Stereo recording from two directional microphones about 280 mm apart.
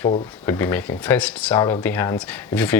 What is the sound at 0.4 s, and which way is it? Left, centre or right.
Speech, centre.